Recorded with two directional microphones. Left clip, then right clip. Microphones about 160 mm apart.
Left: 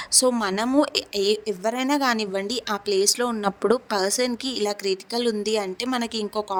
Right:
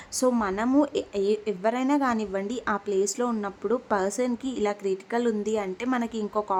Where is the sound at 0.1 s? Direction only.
35° left (ahead or behind).